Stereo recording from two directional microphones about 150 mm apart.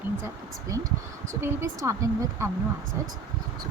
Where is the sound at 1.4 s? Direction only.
20° right (ahead or behind).